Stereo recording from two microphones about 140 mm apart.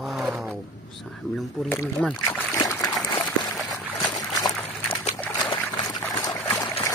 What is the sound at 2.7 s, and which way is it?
Trickle, 20° left (ahead or behind).